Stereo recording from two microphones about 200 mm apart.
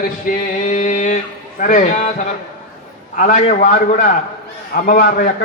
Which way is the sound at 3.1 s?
40° left (ahead or behind).